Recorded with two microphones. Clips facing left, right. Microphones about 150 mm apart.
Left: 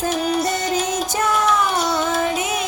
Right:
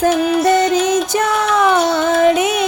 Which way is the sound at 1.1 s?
70° right (ahead or behind).